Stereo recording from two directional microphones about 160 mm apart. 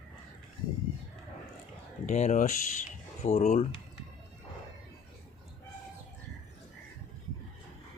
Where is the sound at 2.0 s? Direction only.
45° left (ahead or behind).